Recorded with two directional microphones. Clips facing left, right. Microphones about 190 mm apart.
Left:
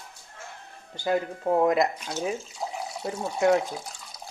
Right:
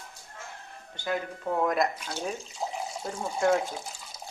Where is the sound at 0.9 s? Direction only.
35° left (ahead or behind).